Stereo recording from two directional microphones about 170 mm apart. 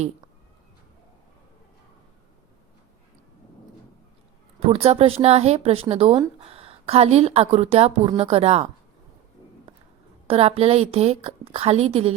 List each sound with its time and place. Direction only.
4.6 s speech: 35° right (ahead or behind)
10.2 s speech: 35° right (ahead or behind)